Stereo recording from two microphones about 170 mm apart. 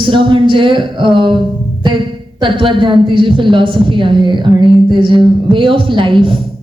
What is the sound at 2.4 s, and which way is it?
A woman's voice, 30° right (ahead or behind).